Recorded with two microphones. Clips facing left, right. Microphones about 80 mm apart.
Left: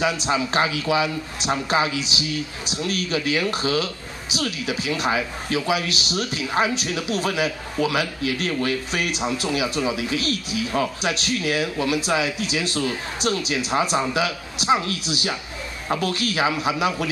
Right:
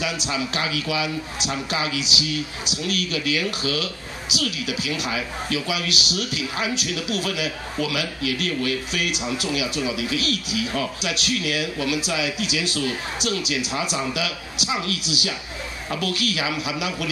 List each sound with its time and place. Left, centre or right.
0.0 s speech: left